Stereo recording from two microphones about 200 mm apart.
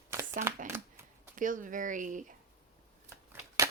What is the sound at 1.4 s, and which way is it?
Speech, 40° right (ahead or behind).